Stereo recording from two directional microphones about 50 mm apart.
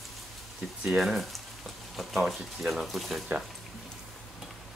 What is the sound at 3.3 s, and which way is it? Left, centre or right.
Speech, right.